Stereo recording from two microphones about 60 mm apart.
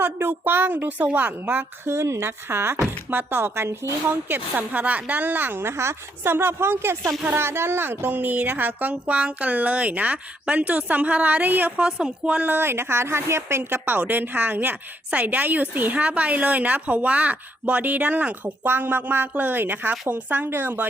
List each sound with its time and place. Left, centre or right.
0.0 s a woman's voice: right
1.9 s a woman's voice: right
4.1 s a woman's voice: right
11.9 s speech: centre
12.4 s a woman's voice: right
18.6 s a woman's voice: right